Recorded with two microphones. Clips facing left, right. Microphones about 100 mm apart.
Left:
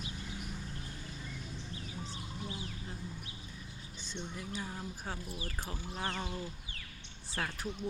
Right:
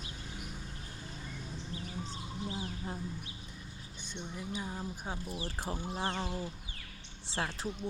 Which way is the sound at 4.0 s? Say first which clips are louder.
Even; 15° right (ahead or behind).